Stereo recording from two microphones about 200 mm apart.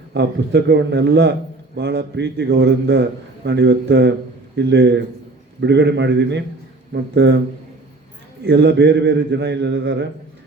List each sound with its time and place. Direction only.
0.1 s a man's voice: 60° right (ahead or behind)
8.4 s a man's voice: 60° right (ahead or behind)